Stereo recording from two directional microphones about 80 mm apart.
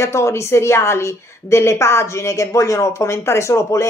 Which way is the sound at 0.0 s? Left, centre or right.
Left.